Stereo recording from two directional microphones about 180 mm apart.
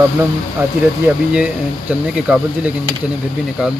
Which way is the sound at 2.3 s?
10° right (ahead or behind).